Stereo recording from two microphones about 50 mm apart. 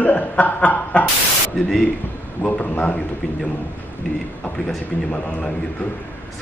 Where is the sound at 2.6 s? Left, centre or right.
Left.